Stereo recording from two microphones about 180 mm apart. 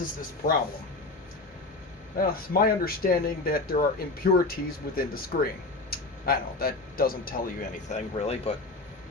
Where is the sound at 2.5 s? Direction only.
55° left (ahead or behind).